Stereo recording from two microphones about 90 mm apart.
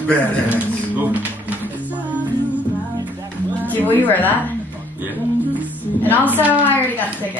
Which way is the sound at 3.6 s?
20° left (ahead or behind).